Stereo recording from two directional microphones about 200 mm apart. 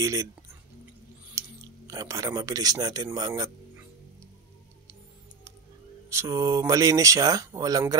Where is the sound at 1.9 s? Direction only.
15° right (ahead or behind).